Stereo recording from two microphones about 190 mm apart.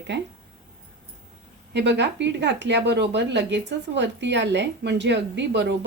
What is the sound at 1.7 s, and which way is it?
Speech, 65° right (ahead or behind).